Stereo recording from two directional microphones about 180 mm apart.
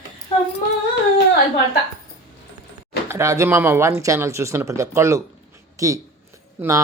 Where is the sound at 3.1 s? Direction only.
15° right (ahead or behind).